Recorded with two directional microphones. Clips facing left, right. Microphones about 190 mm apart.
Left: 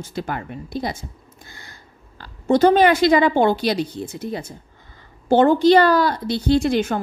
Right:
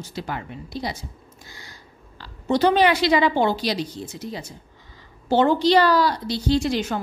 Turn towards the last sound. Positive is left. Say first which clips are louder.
# left 4 dB
turn(degrees=55)  # may be behind; listen again after turning